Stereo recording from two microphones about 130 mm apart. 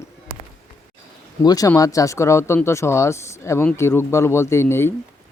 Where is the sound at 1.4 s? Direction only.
30° left (ahead or behind).